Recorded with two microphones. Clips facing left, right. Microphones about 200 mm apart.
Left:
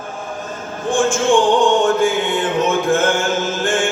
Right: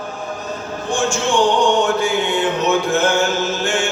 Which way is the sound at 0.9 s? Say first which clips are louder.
Left 3 dB; 50° left (ahead or behind).